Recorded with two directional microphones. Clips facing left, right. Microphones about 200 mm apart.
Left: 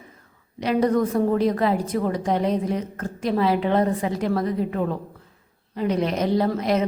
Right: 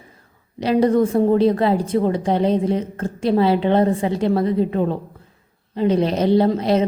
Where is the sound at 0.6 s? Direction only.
30° right (ahead or behind).